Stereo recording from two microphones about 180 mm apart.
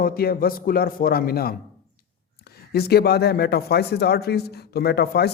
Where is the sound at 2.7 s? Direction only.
60° left (ahead or behind).